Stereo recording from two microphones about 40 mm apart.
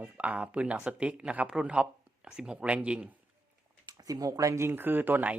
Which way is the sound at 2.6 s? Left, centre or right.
Right.